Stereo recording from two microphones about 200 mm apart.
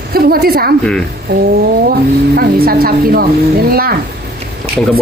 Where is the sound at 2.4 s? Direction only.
50° right (ahead or behind).